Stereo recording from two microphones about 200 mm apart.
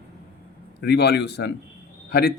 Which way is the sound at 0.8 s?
55° left (ahead or behind).